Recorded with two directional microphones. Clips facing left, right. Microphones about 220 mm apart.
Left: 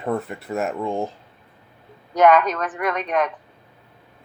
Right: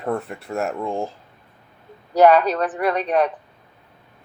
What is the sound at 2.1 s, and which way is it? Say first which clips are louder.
Speech: right 2 dB; 35° right (ahead or behind).